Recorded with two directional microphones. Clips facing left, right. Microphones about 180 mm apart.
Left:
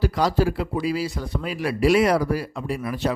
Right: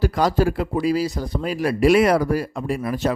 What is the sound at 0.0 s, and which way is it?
A man's voice, 50° right (ahead or behind).